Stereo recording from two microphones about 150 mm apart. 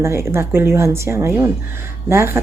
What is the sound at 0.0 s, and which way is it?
A woman's voice, 15° right (ahead or behind).